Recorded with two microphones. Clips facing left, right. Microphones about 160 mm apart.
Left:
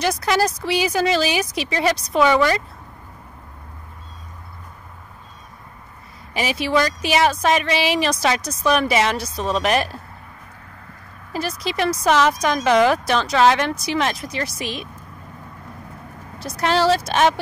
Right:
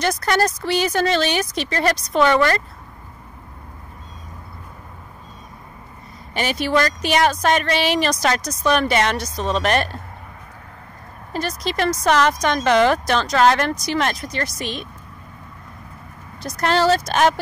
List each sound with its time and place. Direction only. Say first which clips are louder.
0.0 s speech: even; 5° left (ahead or behind)
6.3 s speech: even; 5° left (ahead or behind)
8.4 s speech: right 1 dB; 30° left (ahead or behind)
8.6 s speech: even; centre (ahead or behind)
11.3 s speech: right 1 dB; 5° left (ahead or behind)
16.5 s speech: even; centre (ahead or behind)